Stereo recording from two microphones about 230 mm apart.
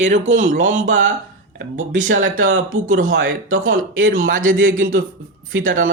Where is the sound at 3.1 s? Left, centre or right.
Right.